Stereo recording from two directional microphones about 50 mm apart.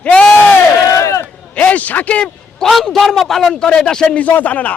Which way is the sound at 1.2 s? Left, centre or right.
Left.